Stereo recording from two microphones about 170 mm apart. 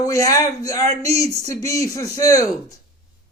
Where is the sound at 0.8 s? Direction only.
40° right (ahead or behind).